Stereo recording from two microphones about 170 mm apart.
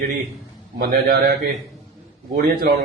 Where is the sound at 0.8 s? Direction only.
70° right (ahead or behind).